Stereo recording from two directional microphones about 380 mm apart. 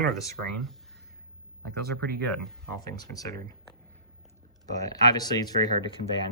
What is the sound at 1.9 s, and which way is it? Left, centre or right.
Speech, centre.